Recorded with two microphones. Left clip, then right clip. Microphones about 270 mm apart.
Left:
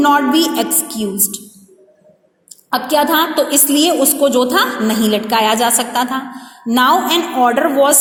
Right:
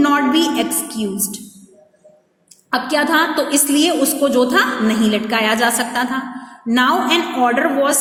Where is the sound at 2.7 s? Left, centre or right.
Centre.